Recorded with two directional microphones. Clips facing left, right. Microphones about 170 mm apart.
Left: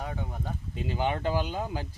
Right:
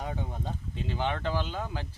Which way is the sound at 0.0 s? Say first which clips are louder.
Even; 15° right (ahead or behind).